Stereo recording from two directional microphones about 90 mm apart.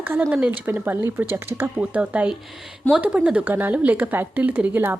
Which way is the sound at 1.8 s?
15° right (ahead or behind).